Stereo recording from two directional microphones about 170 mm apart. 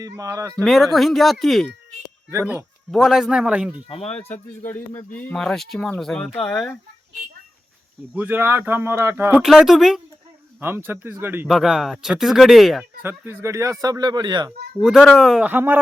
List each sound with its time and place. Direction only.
0.0 s speech: 20° right (ahead or behind)
0.5 s speech: centre (ahead or behind)
2.9 s speech: centre (ahead or behind)
4.3 s speech: 10° left (ahead or behind)
8.1 s speech: 10° right (ahead or behind)
9.3 s speech: centre (ahead or behind)
10.6 s speech: 15° right (ahead or behind)
11.4 s speech: centre (ahead or behind)
13.0 s speech: 10° right (ahead or behind)
14.8 s speech: centre (ahead or behind)